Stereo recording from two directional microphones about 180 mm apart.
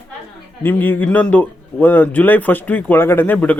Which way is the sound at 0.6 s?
10° left (ahead or behind).